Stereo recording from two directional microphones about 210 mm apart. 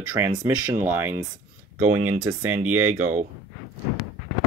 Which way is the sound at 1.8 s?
90° right.